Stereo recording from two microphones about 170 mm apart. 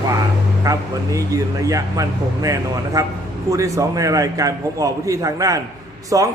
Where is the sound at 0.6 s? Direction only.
20° right (ahead or behind).